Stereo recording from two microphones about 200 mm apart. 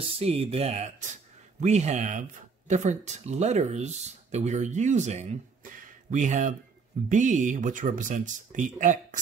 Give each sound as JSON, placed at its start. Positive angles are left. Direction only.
{"t": 0.2, "sound": "speech", "side_deg": -30}